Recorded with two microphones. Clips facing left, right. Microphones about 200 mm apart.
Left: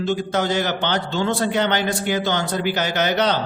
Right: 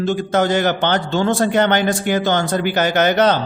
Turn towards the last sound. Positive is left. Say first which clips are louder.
# right 5 dB
turn(degrees=-50)  # may be behind; listen again after turning